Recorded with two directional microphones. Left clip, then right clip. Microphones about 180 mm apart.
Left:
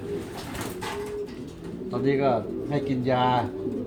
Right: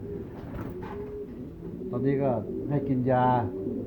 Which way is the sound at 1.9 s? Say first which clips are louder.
Left 4 dB; 5° right (ahead or behind).